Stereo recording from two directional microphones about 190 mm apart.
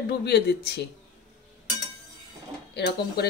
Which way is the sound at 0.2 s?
60° left (ahead or behind).